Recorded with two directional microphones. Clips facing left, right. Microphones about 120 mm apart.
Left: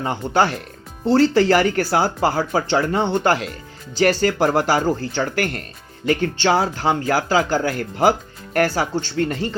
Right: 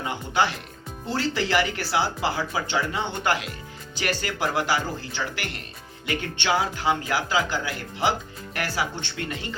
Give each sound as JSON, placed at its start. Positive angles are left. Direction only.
{"t": 0.0, "sound": "speech", "side_deg": 40}